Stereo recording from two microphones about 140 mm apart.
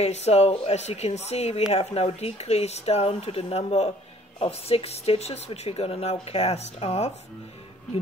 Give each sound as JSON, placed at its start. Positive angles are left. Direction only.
{"t": 0.0, "sound": "speech", "side_deg": 50}